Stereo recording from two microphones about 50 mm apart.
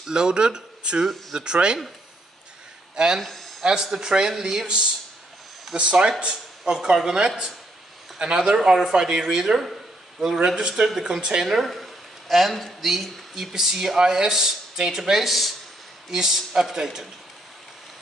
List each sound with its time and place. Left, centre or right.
0.0 s speech: centre
3.2 s speech: centre
3.6 s speech: centre